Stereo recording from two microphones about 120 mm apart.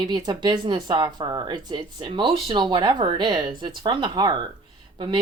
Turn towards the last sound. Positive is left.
turn(degrees=-45)  # may be behind; listen again after turning